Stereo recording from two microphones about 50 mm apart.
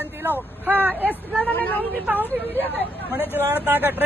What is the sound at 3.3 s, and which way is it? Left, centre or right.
Speech, right.